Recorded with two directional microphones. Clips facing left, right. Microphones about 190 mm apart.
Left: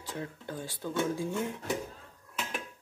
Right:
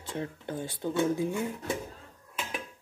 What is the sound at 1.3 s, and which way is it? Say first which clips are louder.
Speech: right 1 dB; centre (ahead or behind).